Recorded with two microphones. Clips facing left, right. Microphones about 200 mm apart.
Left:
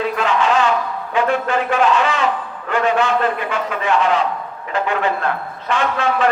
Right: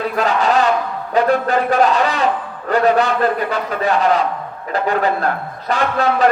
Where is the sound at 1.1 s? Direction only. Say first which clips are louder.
Right 3 dB; 35° right (ahead or behind).